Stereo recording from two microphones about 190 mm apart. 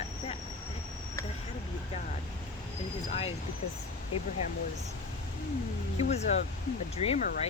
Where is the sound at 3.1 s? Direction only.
30° left (ahead or behind).